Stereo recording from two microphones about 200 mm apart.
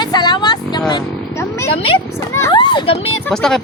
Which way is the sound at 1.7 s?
30° left (ahead or behind).